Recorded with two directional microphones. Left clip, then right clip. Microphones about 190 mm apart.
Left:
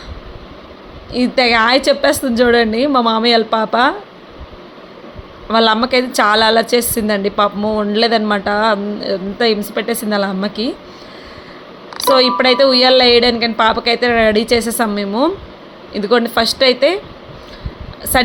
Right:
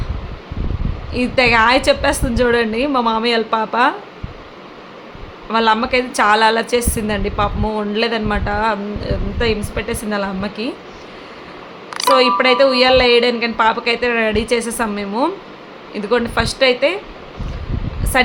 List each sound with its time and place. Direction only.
1.1 s a woman's voice: 15° left (ahead or behind)
5.5 s a woman's voice: 20° left (ahead or behind)
12.1 s a woman's voice: 20° left (ahead or behind)
18.1 s a sound: 20° left (ahead or behind)